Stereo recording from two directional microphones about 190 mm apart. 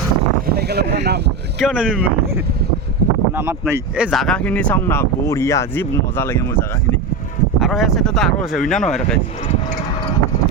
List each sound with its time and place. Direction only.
0.4 s a sound: 55° right (ahead or behind)
1.5 s speech: 5° right (ahead or behind)
7.6 s speech: centre (ahead or behind)